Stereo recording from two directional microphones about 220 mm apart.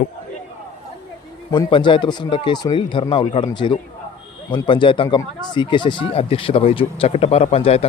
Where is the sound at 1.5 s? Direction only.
20° left (ahead or behind).